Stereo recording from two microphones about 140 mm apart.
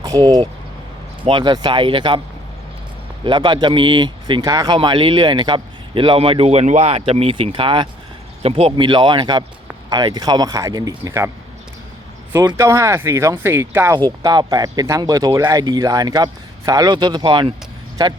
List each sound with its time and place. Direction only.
0.0 s speech: 30° right (ahead or behind)
3.2 s speech: 35° right (ahead or behind)
12.5 s speech: 20° right (ahead or behind)
14.2 s speech: 30° right (ahead or behind)